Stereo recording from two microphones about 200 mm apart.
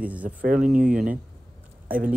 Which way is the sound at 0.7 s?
5° right (ahead or behind).